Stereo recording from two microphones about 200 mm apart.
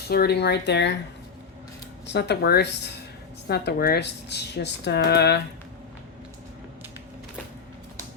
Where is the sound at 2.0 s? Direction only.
55° left (ahead or behind).